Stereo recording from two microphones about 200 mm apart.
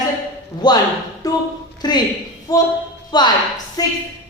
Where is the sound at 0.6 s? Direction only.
20° left (ahead or behind).